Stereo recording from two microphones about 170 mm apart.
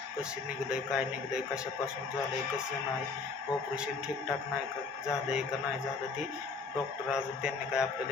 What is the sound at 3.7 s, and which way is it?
Music, 5° right (ahead or behind).